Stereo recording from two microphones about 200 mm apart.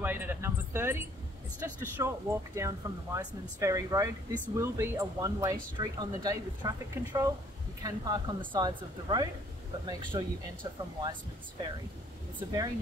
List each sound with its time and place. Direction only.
0.0 s a sound: 10° right (ahead or behind)
1.6 s a woman's voice: 15° right (ahead or behind)
12.4 s speech: 15° right (ahead or behind)